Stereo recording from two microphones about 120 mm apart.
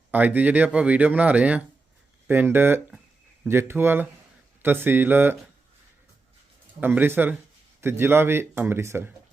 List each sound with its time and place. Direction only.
0.1 s speech: 15° right (ahead or behind)
6.7 s speech: 15° right (ahead or behind)